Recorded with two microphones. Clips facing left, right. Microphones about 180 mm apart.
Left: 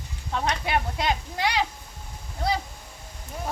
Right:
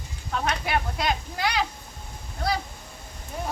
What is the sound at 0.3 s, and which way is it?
Speech, 20° left (ahead or behind).